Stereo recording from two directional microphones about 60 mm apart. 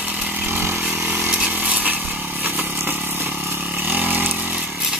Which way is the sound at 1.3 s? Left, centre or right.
Right.